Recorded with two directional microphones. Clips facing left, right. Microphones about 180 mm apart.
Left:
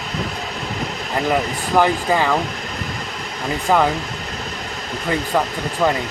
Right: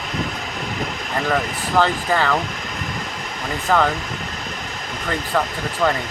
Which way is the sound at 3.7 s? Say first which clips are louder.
Left 1 dB; 15° left (ahead or behind).